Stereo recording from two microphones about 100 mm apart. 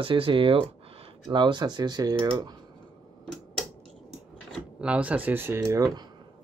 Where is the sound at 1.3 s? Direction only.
50° right (ahead or behind).